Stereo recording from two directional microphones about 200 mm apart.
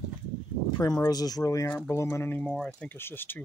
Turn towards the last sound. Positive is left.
turn(degrees=10)  # may be behind; listen again after turning